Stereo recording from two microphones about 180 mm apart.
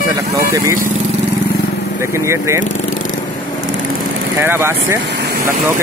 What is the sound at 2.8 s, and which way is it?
Vehicle, 45° left (ahead or behind).